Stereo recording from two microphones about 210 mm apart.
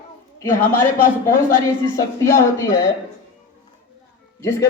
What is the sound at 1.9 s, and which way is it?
Speech, 15° left (ahead or behind).